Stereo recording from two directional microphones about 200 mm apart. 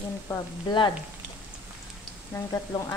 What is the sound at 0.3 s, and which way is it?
Speech, 20° left (ahead or behind).